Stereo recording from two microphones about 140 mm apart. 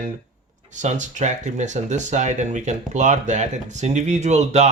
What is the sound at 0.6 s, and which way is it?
Speech, 60° right (ahead or behind).